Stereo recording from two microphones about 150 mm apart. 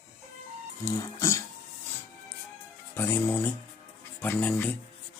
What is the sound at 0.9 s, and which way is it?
Speech, 20° left (ahead or behind).